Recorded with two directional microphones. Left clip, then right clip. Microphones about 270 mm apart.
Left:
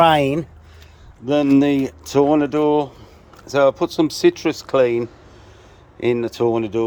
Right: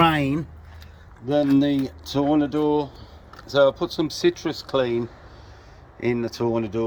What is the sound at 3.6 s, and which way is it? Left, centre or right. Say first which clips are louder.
Speech: left 4 dB; centre.